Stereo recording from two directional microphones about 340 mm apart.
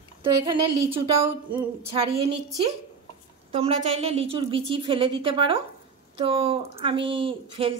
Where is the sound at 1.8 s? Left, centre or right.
Centre.